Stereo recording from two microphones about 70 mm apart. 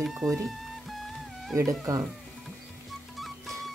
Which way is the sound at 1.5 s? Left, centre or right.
Right.